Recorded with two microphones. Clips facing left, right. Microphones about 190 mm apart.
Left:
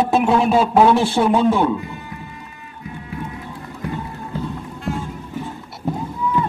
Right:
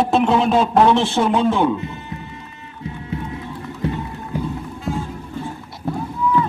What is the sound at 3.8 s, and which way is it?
Music, 25° right (ahead or behind).